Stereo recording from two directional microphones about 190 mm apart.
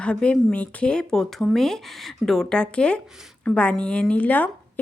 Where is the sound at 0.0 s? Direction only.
5° left (ahead or behind).